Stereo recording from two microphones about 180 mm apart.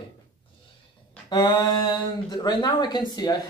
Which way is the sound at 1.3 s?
25° left (ahead or behind).